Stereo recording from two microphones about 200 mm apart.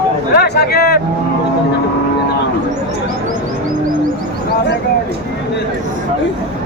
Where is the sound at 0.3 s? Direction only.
55° left (ahead or behind).